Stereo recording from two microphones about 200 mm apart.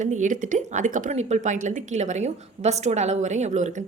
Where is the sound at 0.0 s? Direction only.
40° right (ahead or behind).